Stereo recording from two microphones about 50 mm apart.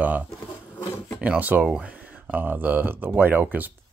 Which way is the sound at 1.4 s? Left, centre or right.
Right.